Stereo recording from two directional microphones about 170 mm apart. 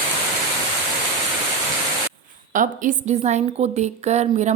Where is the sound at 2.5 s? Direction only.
50° right (ahead or behind).